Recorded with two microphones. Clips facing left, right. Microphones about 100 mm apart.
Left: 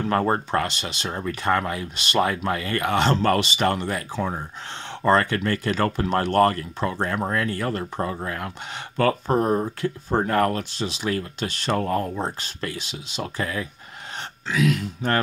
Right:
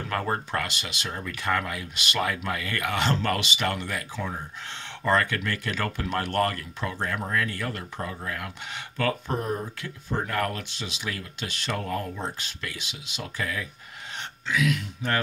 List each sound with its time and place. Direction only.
0.1 s speech: 30° left (ahead or behind)